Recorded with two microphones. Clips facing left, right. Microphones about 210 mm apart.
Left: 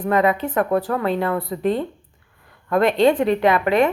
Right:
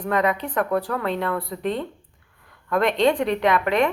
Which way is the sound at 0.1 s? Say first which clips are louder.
Left 4 dB; 5° left (ahead or behind).